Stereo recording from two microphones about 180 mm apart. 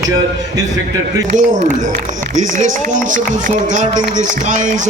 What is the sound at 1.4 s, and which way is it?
Speech, 45° right (ahead or behind).